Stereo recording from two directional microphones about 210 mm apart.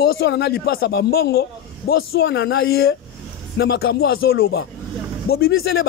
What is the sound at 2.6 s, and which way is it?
A man's voice, 45° left (ahead or behind).